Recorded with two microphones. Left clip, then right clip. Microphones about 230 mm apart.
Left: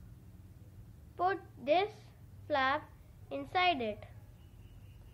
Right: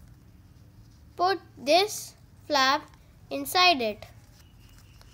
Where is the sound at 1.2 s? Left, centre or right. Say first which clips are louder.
Right 7 dB; right.